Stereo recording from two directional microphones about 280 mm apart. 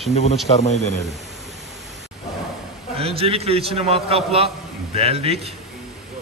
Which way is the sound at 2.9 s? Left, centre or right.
Right.